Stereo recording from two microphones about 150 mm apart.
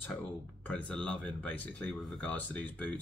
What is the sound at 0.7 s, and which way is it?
Speech, 10° left (ahead or behind).